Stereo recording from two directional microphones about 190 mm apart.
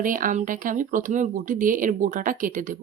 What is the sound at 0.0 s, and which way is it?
A woman's voice, 45° right (ahead or behind).